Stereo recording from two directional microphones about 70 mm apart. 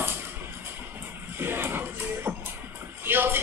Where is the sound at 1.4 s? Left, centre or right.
Right.